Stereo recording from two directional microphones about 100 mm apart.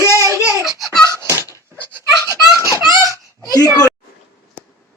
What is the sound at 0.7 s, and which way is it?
Baby laughter, centre (ahead or behind).